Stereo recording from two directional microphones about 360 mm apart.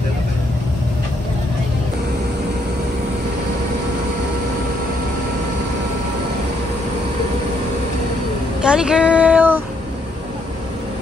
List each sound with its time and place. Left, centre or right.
8.6 s female singing: centre